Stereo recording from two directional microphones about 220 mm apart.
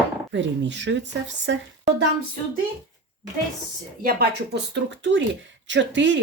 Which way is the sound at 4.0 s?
45° right (ahead or behind).